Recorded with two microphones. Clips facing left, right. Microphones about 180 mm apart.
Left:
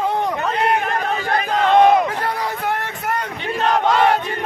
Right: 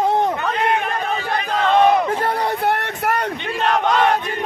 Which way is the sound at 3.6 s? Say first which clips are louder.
Left 1 dB; 5° left (ahead or behind).